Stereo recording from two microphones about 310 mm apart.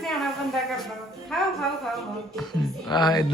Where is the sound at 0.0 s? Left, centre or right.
Centre.